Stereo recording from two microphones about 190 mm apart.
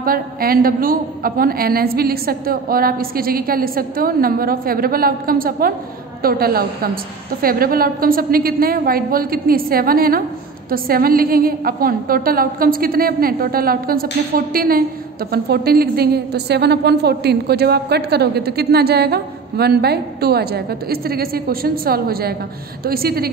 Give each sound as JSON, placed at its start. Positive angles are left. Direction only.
{"t": 0.0, "sound": "a woman's voice", "side_deg": -50}